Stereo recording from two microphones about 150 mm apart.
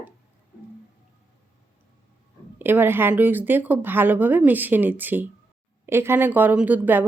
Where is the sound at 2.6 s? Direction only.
15° right (ahead or behind).